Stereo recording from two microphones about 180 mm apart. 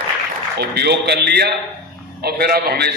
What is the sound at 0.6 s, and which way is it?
A man's voice, 65° right (ahead or behind).